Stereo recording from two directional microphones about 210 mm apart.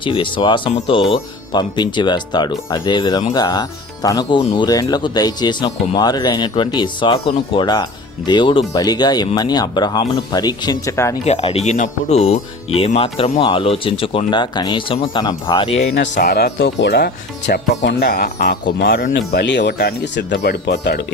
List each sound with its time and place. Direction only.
0.0 s speech: 25° left (ahead or behind)
11.3 s speech: 30° left (ahead or behind)
16.1 s speech: 50° left (ahead or behind)
19.3 s speech: 55° left (ahead or behind)